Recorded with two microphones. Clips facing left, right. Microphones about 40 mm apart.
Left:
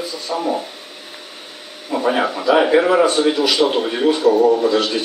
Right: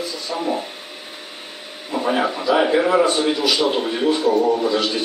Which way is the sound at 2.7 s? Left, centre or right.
Centre.